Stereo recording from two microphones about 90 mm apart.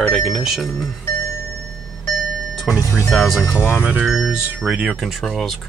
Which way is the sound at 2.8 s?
40° left (ahead or behind).